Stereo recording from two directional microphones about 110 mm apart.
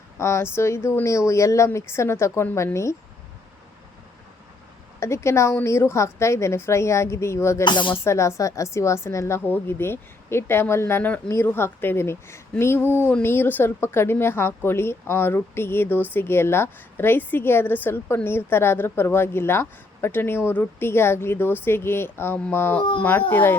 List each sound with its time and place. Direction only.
0.2 s a woman's voice: 25° left (ahead or behind)
4.9 s a woman's voice: 25° left (ahead or behind)
7.6 s speech: 45° left (ahead or behind)
8.0 s a woman's voice: 25° left (ahead or behind)
22.8 s speech: 50° left (ahead or behind)
23.3 s a woman's voice: 20° left (ahead or behind)